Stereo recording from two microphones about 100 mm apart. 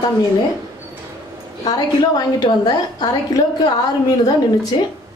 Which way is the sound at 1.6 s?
45° left (ahead or behind).